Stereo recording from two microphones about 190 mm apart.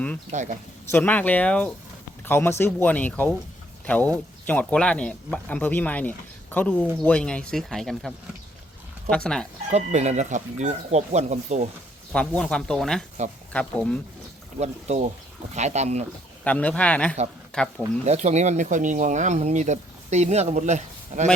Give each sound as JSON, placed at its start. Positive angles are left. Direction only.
{"t": 0.3, "sound": "speech", "side_deg": -40}
{"t": 0.9, "sound": "speech", "side_deg": 10}
{"t": 9.6, "sound": "speech", "side_deg": -35}
{"t": 12.1, "sound": "speech", "side_deg": 5}
{"t": 14.6, "sound": "speech", "side_deg": -35}
{"t": 16.4, "sound": "speech", "side_deg": 5}
{"t": 18.0, "sound": "speech", "side_deg": -35}